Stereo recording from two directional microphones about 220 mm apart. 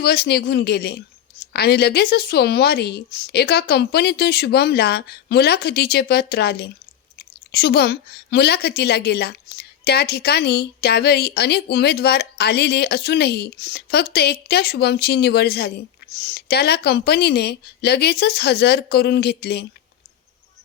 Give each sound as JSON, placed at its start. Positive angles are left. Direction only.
{"t": 0.0, "sound": "a woman's voice", "side_deg": 45}